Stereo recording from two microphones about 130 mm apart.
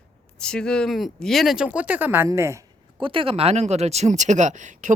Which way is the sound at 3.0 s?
40° right (ahead or behind).